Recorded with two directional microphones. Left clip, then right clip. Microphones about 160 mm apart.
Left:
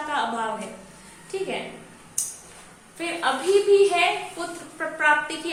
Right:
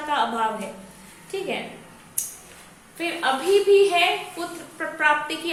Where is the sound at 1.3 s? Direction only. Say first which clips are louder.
Even; 20° right (ahead or behind).